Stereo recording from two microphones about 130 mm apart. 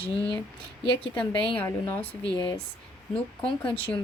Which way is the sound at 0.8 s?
40° left (ahead or behind).